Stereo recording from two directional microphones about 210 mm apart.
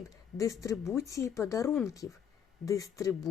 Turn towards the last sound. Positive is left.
turn(degrees=15)  # may be behind; listen again after turning